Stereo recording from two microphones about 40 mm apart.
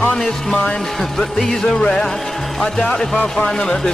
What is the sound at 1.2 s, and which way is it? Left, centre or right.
Music, centre.